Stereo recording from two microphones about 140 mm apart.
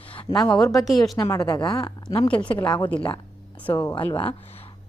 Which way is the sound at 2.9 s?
10° left (ahead or behind).